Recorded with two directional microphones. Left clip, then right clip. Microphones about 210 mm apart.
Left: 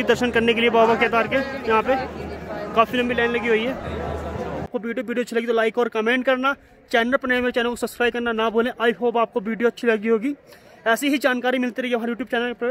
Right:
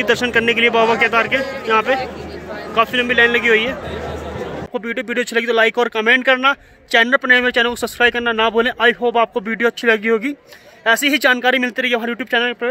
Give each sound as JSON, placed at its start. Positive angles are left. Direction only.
{"t": 0.0, "sound": "a man's voice", "side_deg": 15}
{"t": 4.7, "sound": "speech", "side_deg": 0}